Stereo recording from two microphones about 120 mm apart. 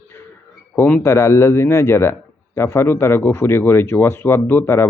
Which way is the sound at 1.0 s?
25° left (ahead or behind).